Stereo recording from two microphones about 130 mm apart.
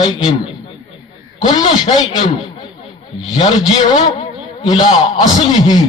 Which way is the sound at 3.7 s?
45° left (ahead or behind).